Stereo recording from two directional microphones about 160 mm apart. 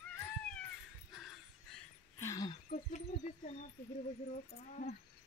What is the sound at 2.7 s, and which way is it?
Speech, 45° left (ahead or behind).